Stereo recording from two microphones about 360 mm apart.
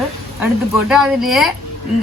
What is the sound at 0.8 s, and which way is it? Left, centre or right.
Speech, centre.